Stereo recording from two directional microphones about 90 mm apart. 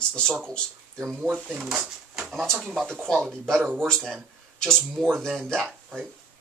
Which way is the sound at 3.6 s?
20° right (ahead or behind).